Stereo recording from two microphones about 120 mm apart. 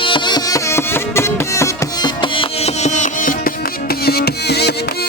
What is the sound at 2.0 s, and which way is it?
Music, 45° left (ahead or behind).